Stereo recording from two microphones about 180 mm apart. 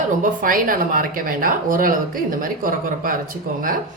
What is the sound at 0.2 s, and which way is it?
A woman's voice, 50° right (ahead or behind).